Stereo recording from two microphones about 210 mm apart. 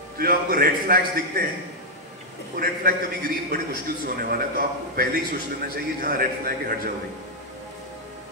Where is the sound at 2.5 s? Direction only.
45° right (ahead or behind).